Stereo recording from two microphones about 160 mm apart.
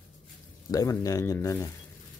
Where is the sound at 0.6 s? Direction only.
20° left (ahead or behind).